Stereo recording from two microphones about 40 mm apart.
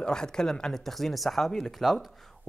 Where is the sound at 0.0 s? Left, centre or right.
Centre.